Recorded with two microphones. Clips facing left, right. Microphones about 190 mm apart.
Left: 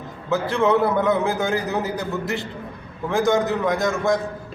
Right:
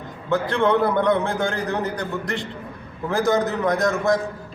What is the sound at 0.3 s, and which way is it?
A man's voice, 5° left (ahead or behind).